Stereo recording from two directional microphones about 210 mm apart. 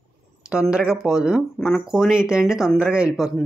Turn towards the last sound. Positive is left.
turn(degrees=-5)  # may be behind; listen again after turning